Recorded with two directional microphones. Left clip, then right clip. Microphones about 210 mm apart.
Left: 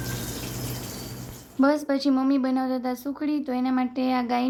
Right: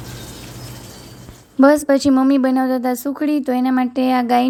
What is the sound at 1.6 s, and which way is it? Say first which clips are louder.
A woman's voice: right 10 dB; 35° right (ahead or behind).